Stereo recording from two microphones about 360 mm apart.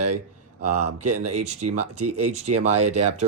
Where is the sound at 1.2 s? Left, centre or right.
Centre.